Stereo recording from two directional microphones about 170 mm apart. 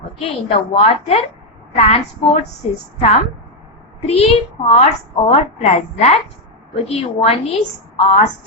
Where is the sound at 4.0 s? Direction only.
35° left (ahead or behind).